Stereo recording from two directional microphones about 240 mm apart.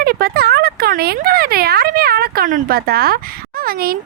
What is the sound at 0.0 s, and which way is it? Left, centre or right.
Speech, right.